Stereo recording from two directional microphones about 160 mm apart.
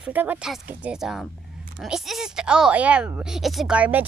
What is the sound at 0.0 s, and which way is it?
A child's voice, 10° right (ahead or behind).